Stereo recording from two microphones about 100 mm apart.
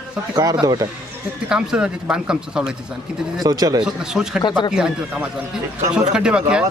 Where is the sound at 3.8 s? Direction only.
5° right (ahead or behind).